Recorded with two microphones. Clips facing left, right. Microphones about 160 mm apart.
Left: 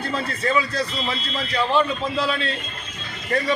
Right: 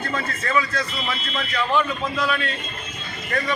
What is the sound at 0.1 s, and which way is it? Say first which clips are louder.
A man's voice: left 2 dB; 30° left (ahead or behind).